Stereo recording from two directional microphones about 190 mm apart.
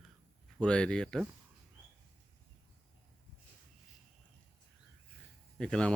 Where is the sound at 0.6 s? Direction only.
5° left (ahead or behind).